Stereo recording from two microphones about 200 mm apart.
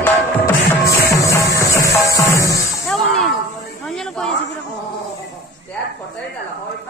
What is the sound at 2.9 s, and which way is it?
Music, centre (ahead or behind).